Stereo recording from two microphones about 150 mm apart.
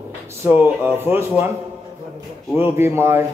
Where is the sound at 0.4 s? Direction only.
15° right (ahead or behind).